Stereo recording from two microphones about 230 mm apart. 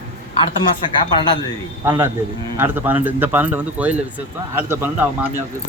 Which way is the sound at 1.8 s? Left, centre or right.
Centre.